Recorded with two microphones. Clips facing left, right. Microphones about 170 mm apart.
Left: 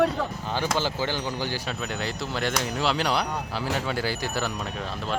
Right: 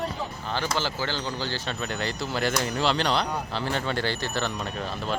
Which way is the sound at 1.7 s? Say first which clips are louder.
Even; centre (ahead or behind).